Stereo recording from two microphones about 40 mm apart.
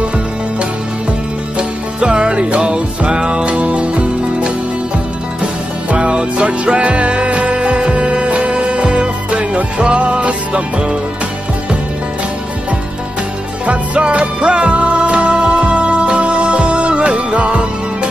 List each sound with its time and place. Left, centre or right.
1.6 s music: right
13.7 s music: right